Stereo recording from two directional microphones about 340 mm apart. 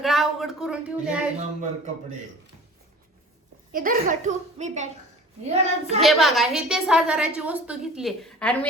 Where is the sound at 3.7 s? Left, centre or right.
Right.